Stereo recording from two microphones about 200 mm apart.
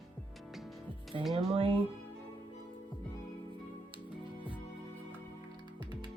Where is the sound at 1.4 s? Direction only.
30° right (ahead or behind).